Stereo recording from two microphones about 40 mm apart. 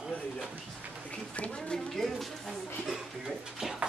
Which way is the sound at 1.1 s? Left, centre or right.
Left.